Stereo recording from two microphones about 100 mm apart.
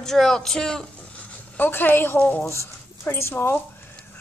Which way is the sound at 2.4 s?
30° left (ahead or behind).